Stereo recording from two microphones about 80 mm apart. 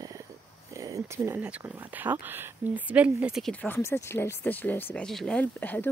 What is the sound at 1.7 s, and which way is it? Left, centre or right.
Speech, right.